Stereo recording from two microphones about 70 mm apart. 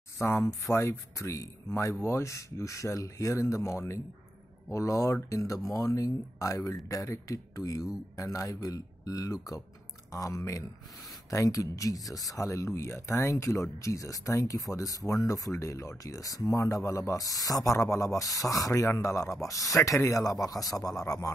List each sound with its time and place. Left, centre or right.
0.2 s speech: left